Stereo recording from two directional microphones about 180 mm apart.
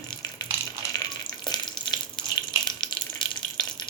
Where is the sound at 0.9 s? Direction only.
20° left (ahead or behind).